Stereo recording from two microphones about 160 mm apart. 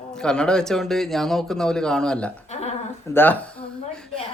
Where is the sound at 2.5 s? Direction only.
45° left (ahead or behind).